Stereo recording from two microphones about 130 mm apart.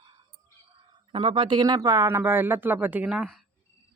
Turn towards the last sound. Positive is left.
turn(degrees=-5)  # may be behind; listen again after turning